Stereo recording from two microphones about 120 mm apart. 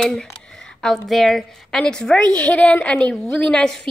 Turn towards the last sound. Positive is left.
turn(degrees=5)  # may be behind; listen again after turning